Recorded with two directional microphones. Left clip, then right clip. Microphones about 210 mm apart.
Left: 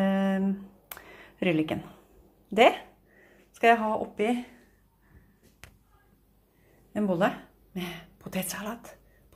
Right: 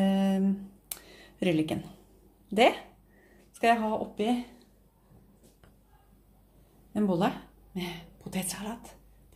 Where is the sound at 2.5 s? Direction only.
5° left (ahead or behind).